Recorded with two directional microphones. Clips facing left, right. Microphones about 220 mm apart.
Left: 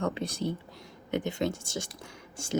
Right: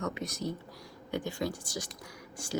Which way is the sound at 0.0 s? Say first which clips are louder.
Left 4 dB; 30° left (ahead or behind).